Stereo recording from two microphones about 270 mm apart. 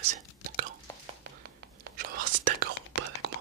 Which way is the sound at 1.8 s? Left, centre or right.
Right.